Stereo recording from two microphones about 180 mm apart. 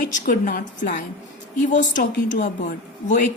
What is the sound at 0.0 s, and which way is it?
A woman's voice, 50° left (ahead or behind).